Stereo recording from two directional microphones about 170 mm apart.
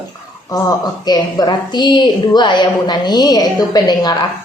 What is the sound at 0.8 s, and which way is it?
A woman's voice, 25° left (ahead or behind).